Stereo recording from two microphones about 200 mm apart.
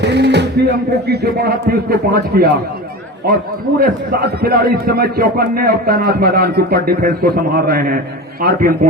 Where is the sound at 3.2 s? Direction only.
45° right (ahead or behind).